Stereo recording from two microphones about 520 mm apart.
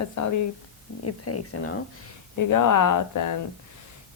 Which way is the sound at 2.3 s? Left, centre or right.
Left.